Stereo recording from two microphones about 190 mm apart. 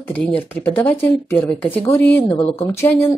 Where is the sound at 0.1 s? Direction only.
10° left (ahead or behind).